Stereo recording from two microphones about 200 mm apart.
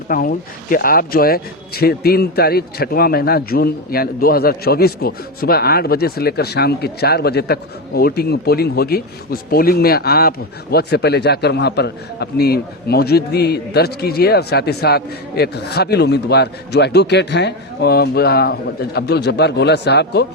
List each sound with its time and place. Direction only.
0.1 s speech: 45° left (ahead or behind)